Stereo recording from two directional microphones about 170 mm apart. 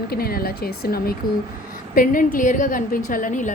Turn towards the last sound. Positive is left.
turn(degrees=50)  # may be behind; listen again after turning